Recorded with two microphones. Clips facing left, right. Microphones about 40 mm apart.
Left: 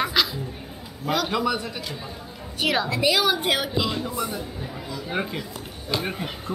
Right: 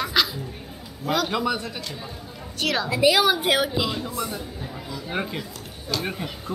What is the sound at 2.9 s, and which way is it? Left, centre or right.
A child's voice, centre.